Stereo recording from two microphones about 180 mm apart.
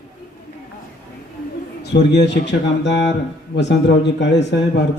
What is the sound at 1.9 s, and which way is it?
Speech, 70° left (ahead or behind).